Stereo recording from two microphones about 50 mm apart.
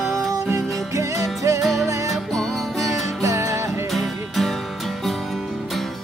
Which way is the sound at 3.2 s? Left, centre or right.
Right.